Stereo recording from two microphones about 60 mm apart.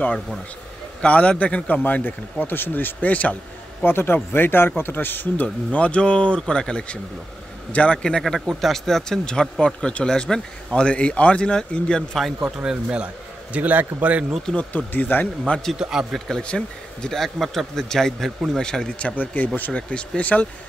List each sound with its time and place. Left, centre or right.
1.0 s a man's voice: left
3.8 s a man's voice: left; by 8.2 s centre
8.2 s speech: centre
12.5 s a man's voice: centre
14.4 s a man's voice: centre
14.9 s speech: left
15.7 s a man's voice: centre
16.3 s speech: centre
19.1 s a man's voice: left